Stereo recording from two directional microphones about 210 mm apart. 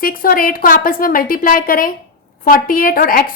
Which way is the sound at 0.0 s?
45° left (ahead or behind).